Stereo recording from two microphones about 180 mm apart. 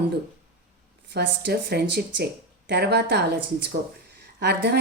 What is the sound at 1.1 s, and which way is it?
A woman's voice, 70° right (ahead or behind).